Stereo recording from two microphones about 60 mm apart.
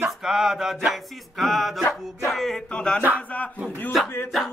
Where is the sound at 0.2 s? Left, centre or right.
Centre.